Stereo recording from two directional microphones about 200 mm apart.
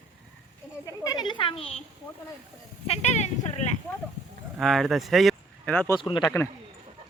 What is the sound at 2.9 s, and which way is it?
Speech, 35° left (ahead or behind).